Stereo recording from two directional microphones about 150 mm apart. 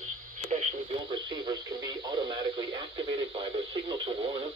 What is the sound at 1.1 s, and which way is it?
Speech, 30° right (ahead or behind).